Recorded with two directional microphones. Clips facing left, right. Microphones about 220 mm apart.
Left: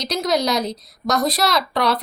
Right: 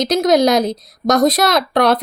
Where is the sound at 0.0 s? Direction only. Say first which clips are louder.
Right 8 dB; 50° right (ahead or behind).